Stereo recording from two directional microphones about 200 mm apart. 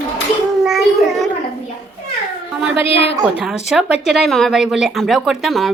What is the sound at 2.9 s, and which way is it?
Speech, 30° left (ahead or behind).